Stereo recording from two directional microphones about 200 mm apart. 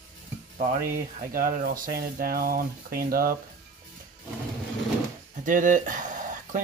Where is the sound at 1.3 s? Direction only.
45° right (ahead or behind).